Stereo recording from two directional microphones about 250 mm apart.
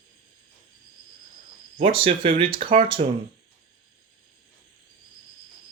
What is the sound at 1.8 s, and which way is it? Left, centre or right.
Speech, right.